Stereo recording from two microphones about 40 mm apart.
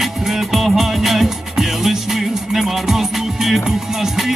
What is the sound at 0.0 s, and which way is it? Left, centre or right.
Music, centre.